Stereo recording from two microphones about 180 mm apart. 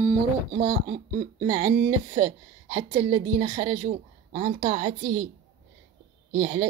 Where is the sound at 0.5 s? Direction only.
50° right (ahead or behind).